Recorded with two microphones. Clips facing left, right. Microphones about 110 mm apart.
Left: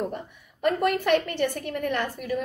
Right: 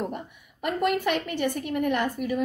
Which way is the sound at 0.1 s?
15° right (ahead or behind).